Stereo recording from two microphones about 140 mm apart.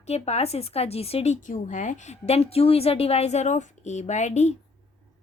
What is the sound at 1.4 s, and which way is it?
A woman's voice, 70° left (ahead or behind).